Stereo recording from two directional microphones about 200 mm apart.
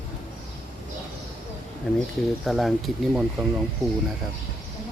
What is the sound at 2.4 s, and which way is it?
Speech, centre (ahead or behind).